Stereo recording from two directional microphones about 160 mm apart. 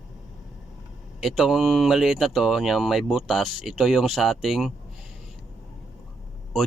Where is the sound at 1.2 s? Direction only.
Centre (ahead or behind).